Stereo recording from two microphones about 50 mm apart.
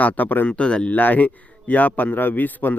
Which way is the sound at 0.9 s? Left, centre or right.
Left.